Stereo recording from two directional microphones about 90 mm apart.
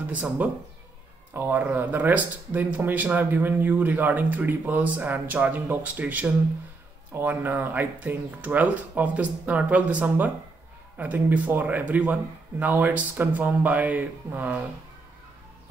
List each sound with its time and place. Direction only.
0.1 s speech: 15° right (ahead or behind)